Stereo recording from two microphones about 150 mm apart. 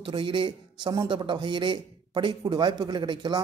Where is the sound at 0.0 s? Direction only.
35° right (ahead or behind).